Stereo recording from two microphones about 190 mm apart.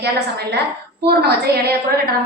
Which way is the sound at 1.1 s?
55° right (ahead or behind).